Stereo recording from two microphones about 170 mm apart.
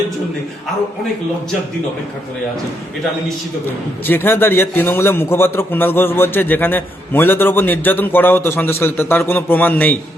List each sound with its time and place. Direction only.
4.0 s a man's voice: 10° left (ahead or behind)